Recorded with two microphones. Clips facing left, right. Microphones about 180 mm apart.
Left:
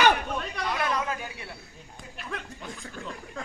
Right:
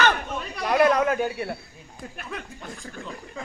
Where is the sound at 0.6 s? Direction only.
65° right (ahead or behind).